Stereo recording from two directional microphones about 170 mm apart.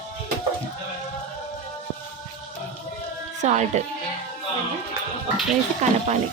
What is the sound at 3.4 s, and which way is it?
Speech, 45° right (ahead or behind).